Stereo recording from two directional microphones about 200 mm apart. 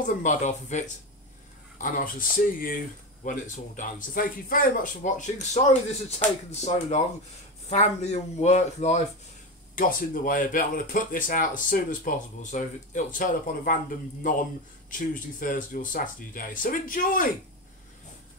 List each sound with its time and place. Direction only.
0.0 s speech: 40° left (ahead or behind)